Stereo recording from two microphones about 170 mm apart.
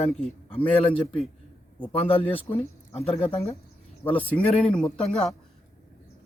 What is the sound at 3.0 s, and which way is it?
Speech, 35° left (ahead or behind).